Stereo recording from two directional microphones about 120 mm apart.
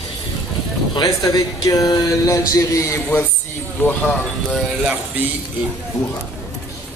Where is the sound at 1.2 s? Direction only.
30° left (ahead or behind).